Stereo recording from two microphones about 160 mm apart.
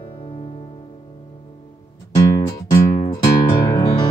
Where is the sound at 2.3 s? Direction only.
20° left (ahead or behind).